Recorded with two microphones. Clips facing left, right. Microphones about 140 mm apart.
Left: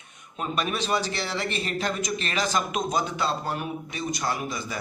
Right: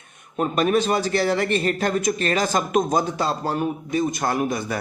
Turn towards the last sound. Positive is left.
turn(degrees=-55)  # may be behind; listen again after turning